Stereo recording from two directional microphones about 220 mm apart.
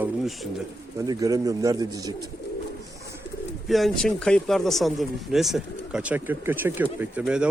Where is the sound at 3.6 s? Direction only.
Centre (ahead or behind).